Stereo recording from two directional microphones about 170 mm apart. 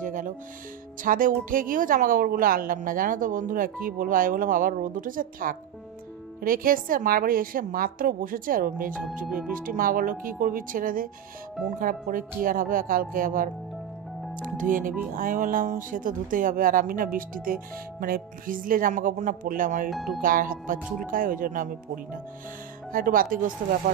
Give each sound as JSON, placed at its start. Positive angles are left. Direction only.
{"t": 0.0, "sound": "music", "side_deg": -50}
{"t": 1.0, "sound": "a woman's voice", "side_deg": -55}
{"t": 19.9, "sound": "speech", "side_deg": 0}
{"t": 20.2, "sound": "speech", "side_deg": -55}